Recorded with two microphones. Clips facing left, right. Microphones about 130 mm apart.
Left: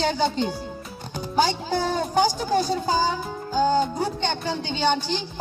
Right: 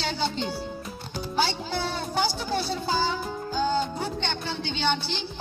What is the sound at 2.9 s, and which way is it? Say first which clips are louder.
Music: left 3 dB; 45° left (ahead or behind).